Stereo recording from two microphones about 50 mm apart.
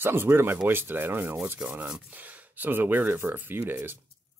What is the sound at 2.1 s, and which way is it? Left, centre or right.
Speech, right.